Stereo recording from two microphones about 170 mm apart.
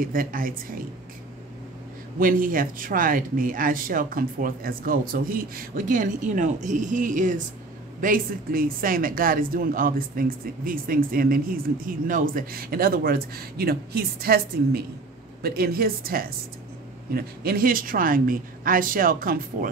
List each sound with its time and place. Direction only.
0.0 s speech: 55° right (ahead or behind)
2.1 s speech: 55° right (ahead or behind)